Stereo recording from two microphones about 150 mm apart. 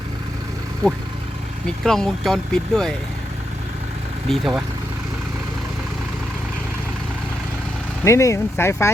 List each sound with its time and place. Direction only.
1.6 s speech: 5° left (ahead or behind)
4.3 s speech: centre (ahead or behind)
8.0 s speech: 20° left (ahead or behind)